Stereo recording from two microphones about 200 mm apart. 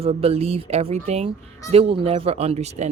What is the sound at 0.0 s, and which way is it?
Speech, 30° right (ahead or behind).